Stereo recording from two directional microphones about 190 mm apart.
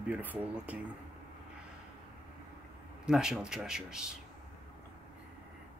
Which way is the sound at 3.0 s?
5° right (ahead or behind).